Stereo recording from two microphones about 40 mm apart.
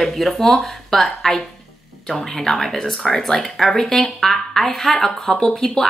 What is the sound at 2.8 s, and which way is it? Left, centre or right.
Speech, centre.